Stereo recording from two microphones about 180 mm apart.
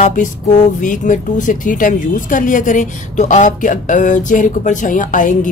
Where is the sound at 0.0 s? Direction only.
45° left (ahead or behind).